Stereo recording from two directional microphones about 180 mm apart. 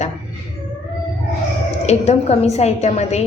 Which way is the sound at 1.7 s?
35° left (ahead or behind).